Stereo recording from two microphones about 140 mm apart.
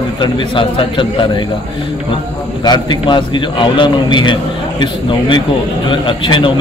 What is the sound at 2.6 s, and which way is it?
A man's voice, 30° left (ahead or behind).